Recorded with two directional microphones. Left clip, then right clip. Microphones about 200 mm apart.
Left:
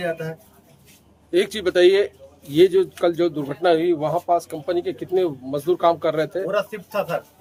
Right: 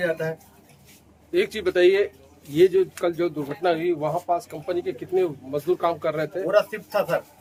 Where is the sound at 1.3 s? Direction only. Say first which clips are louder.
Left 3 dB; 55° left (ahead or behind).